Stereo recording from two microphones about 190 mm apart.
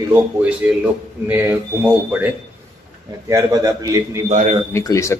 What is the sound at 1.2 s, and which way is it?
Speech, 10° right (ahead or behind).